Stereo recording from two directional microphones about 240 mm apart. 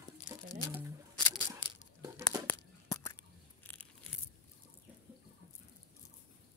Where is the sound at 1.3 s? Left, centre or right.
Centre.